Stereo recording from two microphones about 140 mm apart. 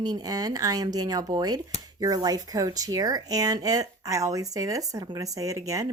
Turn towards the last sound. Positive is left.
turn(degrees=-25)  # may be behind; listen again after turning